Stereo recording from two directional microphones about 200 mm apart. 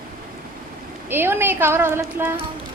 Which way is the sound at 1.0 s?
10° right (ahead or behind).